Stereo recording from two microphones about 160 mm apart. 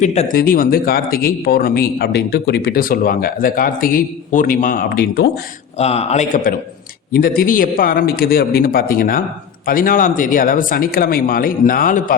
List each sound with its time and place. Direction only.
0.0 s speech: 45° left (ahead or behind)
0.3 s a man's voice: 65° left (ahead or behind)
5.7 s speech: 40° left (ahead or behind)
7.1 s a man's voice: 70° left (ahead or behind)